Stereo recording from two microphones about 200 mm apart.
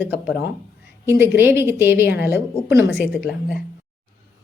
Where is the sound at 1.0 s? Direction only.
10° right (ahead or behind).